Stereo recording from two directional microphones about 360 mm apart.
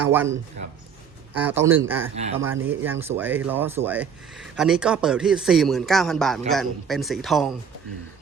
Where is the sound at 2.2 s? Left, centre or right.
Centre.